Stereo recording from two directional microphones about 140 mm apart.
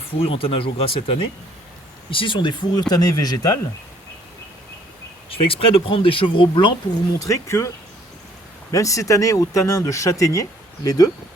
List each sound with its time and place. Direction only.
0.2 s speech: 40° left (ahead or behind); by 3.6 s 25° left (ahead or behind)
5.3 s speech: 40° left (ahead or behind)
7.2 s speech: 20° left (ahead or behind)
8.7 s speech: 25° left (ahead or behind)